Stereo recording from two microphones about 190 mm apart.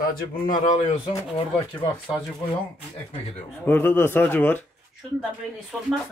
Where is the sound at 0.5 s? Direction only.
40° left (ahead or behind).